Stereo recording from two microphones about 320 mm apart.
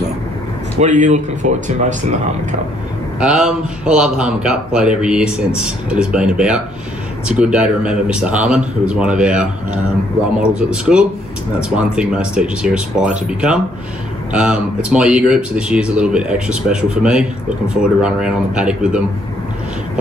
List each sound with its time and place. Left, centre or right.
0.7 s speech: right
3.2 s speech: centre
10.5 s speech: centre